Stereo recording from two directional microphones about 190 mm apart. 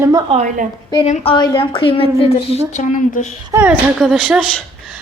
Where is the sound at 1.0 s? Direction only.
35° left (ahead or behind).